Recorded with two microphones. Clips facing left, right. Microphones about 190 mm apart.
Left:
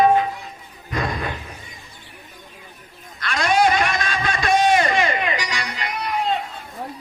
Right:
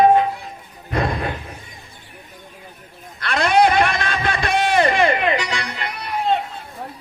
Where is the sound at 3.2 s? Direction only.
55° right (ahead or behind).